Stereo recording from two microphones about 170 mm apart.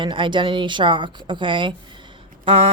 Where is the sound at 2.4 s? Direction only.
35° right (ahead or behind).